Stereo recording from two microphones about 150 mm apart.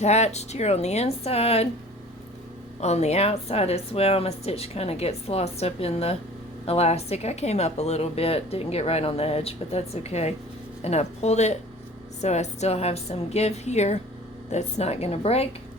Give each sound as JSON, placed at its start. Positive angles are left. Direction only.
{"t": 0.0, "sound": "a woman's voice", "side_deg": 45}
{"t": 2.8, "sound": "a woman's voice", "side_deg": 45}